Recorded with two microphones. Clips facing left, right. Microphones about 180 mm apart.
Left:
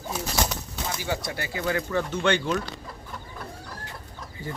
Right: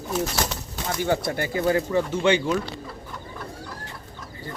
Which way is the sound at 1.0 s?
55° right (ahead or behind).